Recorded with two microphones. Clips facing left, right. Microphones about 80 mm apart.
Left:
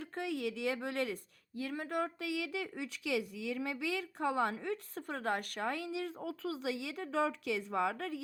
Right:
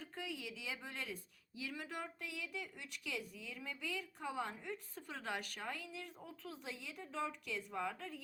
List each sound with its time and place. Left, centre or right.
0.0 s speech: left
1.5 s speech: left
2.2 s speech: left
5.0 s speech: left